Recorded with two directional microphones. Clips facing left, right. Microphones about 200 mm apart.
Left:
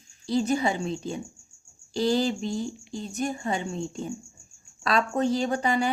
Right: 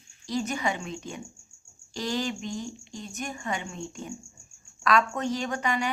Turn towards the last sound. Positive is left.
turn(degrees=35)  # may be behind; listen again after turning